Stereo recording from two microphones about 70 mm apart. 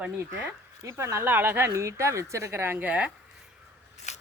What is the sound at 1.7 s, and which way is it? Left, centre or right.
Speech, right.